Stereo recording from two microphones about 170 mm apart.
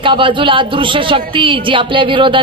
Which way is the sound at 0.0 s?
30° right (ahead or behind).